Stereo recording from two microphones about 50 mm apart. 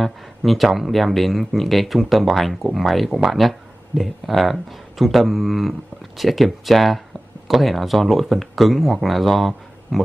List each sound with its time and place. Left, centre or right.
0.0 s speech: centre